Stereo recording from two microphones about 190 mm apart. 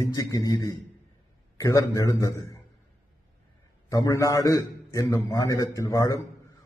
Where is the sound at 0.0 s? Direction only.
15° left (ahead or behind).